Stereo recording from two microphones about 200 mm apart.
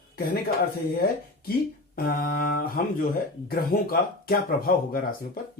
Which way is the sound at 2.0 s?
50° left (ahead or behind).